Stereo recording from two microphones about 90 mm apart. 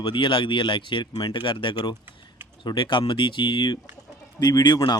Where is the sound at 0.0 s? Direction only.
70° left (ahead or behind).